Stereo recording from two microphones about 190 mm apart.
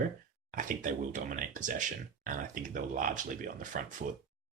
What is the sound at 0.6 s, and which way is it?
Speech, 45° right (ahead or behind).